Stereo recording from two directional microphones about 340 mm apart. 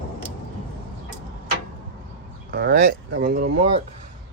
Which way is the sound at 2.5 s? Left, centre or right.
Right.